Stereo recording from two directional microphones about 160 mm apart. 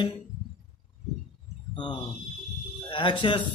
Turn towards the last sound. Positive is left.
turn(degrees=30)  # may be behind; listen again after turning